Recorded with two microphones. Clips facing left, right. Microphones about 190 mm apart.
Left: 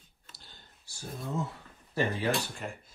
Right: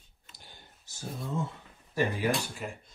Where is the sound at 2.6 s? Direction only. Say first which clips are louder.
Right 1 dB; centre (ahead or behind).